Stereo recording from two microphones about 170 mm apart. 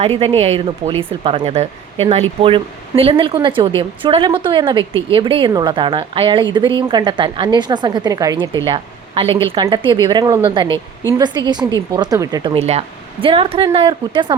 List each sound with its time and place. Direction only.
0.0 s a woman's voice: 35° right (ahead or behind)